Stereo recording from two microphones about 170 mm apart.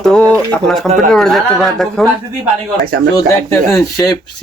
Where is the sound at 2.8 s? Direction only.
65° right (ahead or behind).